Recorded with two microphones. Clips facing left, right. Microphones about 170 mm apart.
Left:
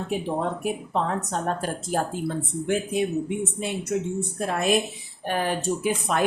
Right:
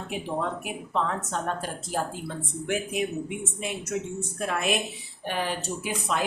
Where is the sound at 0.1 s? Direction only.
40° left (ahead or behind).